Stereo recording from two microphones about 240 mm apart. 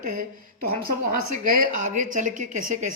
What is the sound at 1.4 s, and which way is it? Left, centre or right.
A woman's voice, right.